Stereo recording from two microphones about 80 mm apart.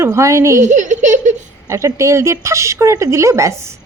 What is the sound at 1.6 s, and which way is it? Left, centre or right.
Speech, right.